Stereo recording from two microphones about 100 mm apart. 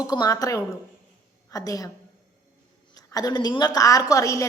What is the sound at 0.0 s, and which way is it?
A woman's voice, 40° left (ahead or behind).